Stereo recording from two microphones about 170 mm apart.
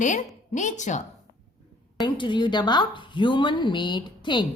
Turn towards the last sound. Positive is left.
turn(degrees=25)  # may be behind; listen again after turning